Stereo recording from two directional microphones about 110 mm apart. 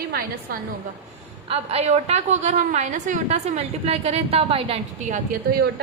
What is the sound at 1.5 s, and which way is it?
A woman's voice, 70° right (ahead or behind).